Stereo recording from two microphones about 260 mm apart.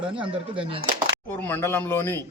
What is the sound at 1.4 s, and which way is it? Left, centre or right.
Speech, centre.